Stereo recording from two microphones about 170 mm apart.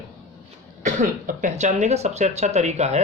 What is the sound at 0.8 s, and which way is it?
A man's voice, 45° right (ahead or behind).